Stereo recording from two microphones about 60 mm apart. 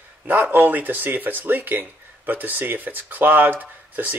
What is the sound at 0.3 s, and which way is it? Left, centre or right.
Speech, right.